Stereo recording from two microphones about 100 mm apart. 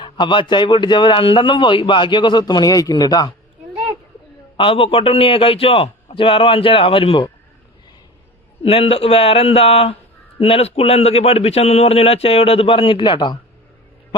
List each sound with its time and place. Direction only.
0.0 s speech: 50° left (ahead or behind)
4.5 s a man's voice: 60° left (ahead or behind)
8.6 s a man's voice: 75° left (ahead or behind); by 13.4 s 50° left (ahead or behind)